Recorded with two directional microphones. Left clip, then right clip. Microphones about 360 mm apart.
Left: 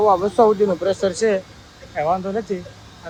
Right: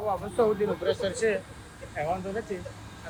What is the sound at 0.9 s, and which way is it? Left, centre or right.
Speech, centre.